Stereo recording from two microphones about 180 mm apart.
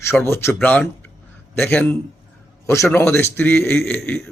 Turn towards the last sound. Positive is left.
turn(degrees=5)  # may be behind; listen again after turning